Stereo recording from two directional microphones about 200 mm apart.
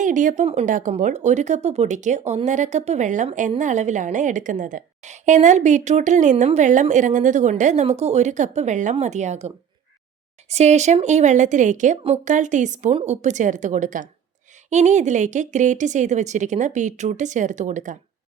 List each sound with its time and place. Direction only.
0.0 s speech: 40° right (ahead or behind)
10.5 s speech: 35° right (ahead or behind)